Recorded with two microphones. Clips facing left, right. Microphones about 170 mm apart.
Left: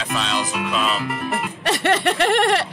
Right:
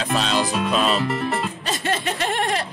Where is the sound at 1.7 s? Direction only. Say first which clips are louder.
Left 8 dB; 70° left (ahead or behind).